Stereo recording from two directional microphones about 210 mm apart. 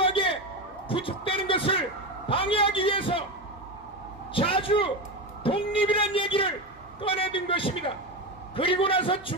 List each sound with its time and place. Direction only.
0.0 s a sound: 25° left (ahead or behind)
0.8 s a man's voice: 25° left (ahead or behind)
4.3 s a man's voice: 25° left (ahead or behind)